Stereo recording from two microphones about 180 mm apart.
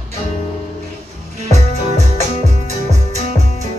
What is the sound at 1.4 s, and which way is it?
Music, 40° right (ahead or behind).